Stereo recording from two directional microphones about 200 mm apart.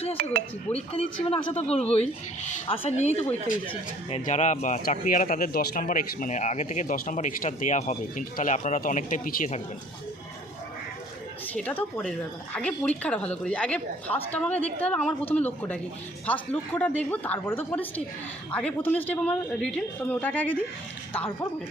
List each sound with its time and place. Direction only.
0.7 s speech: 30° left (ahead or behind)
11.4 s a man's voice: 10° left (ahead or behind)